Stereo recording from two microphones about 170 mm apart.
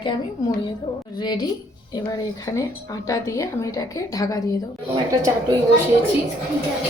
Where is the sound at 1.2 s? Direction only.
25° left (ahead or behind).